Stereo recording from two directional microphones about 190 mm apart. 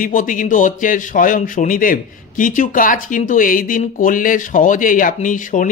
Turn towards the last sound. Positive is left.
turn(degrees=45)  # may be behind; listen again after turning